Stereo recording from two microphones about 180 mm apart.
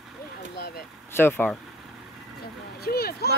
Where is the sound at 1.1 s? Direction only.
10° left (ahead or behind).